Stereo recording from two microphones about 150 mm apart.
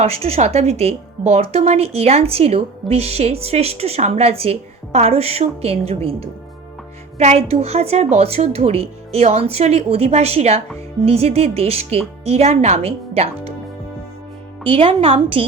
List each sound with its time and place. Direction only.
0.0 s speech: 40° right (ahead or behind)
7.2 s speech: 45° right (ahead or behind)
14.6 s a woman's voice: 35° right (ahead or behind)